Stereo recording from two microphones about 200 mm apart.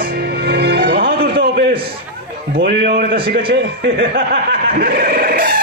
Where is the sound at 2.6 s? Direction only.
55° right (ahead or behind).